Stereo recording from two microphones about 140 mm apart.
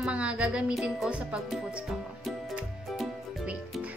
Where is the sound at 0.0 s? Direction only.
10° right (ahead or behind).